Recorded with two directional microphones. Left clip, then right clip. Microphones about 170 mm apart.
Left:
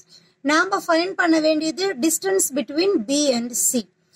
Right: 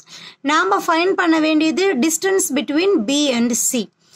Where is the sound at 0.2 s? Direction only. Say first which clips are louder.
Right 2 dB; 30° right (ahead or behind).